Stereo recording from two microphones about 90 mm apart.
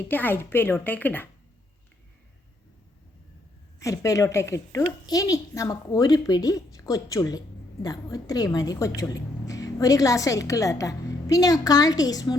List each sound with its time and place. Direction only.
0.1 s a woman's voice: 20° left (ahead or behind)
3.8 s a woman's voice: 35° left (ahead or behind)